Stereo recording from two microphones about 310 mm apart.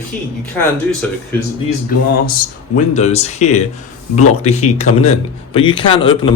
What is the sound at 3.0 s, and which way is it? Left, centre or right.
Speech, left.